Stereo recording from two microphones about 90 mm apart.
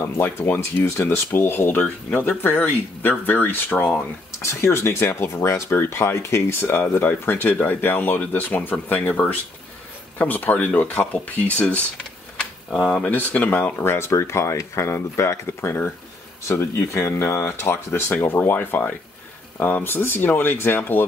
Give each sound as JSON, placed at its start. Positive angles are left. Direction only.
{"t": 0.0, "sound": "speech", "side_deg": 25}
{"t": 4.5, "sound": "speech", "side_deg": 30}
{"t": 12.9, "sound": "speech", "side_deg": 15}